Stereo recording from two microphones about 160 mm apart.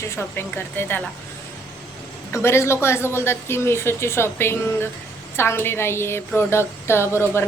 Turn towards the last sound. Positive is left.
turn(degrees=15)  # may be behind; listen again after turning